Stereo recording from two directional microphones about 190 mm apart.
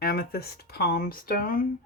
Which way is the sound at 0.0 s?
55° left (ahead or behind).